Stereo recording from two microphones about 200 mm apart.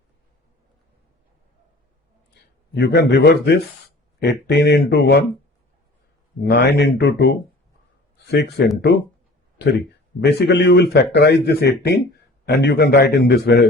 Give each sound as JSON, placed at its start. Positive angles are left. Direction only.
{"t": 2.7, "sound": "a man's voice", "side_deg": 60}
{"t": 6.4, "sound": "a man's voice", "side_deg": 60}
{"t": 10.2, "sound": "a man's voice", "side_deg": 60}